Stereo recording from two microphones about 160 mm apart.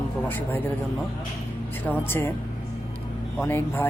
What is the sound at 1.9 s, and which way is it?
Speech, 15° left (ahead or behind).